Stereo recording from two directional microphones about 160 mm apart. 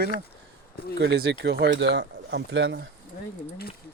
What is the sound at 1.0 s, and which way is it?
Speech, 90° right.